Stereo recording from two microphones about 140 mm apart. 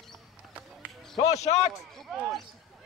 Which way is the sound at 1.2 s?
50° left (ahead or behind).